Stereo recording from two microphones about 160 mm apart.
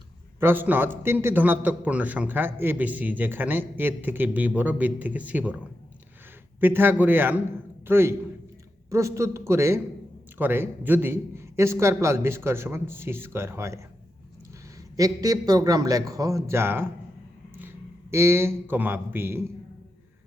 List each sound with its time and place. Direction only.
0.3 s a man's voice: 15° right (ahead or behind)
6.6 s a man's voice: 10° right (ahead or behind)
14.9 s a man's voice: 20° right (ahead or behind)
18.1 s a man's voice: 15° right (ahead or behind)